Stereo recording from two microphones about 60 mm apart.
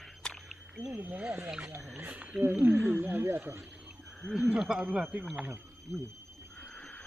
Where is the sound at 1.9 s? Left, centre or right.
Right.